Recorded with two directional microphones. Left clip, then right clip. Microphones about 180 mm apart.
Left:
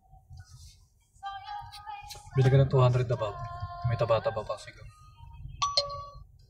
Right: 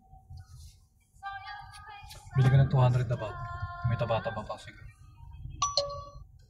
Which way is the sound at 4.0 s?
60° left (ahead or behind).